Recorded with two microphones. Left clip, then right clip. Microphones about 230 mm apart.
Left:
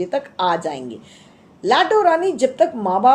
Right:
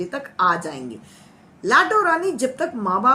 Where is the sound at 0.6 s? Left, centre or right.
Right.